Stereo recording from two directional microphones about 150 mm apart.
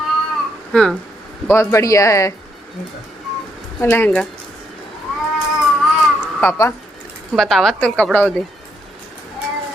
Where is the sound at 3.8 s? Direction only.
15° left (ahead or behind).